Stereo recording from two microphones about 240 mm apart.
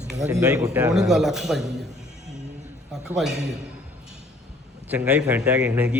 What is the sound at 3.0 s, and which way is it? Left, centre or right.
Speech, centre.